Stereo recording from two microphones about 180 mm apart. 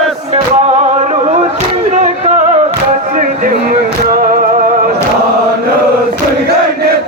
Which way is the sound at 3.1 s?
50° right (ahead or behind).